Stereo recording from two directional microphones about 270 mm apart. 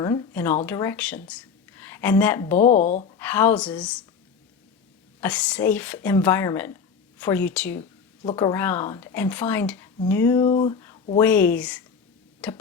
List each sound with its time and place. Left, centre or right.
0.0 s speech: centre
2.6 s speech: left
3.2 s speech: centre
5.2 s speech: centre